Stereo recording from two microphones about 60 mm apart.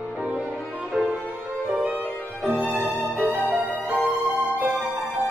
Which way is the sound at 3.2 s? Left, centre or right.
Right.